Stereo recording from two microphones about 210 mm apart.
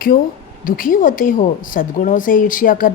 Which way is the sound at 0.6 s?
40° left (ahead or behind).